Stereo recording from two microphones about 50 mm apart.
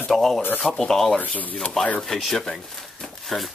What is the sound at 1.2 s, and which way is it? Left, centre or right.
Speech, left.